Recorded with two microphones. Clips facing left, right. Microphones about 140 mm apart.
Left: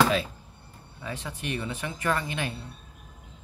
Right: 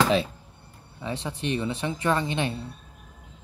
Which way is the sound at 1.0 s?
25° right (ahead or behind).